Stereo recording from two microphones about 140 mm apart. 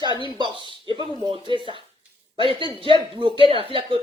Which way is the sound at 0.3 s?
35° right (ahead or behind).